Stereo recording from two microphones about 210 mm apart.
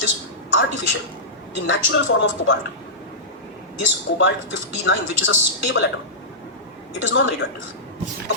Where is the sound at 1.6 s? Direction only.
65° left (ahead or behind).